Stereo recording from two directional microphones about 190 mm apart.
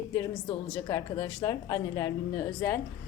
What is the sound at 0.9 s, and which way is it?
A woman's voice, 20° left (ahead or behind).